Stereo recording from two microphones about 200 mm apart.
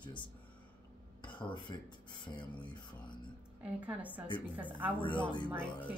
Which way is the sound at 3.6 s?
5° right (ahead or behind).